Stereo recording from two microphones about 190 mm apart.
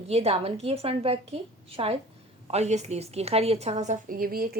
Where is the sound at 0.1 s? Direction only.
35° right (ahead or behind).